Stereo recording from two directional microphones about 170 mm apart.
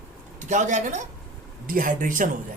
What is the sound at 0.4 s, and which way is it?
A man's voice, 45° right (ahead or behind).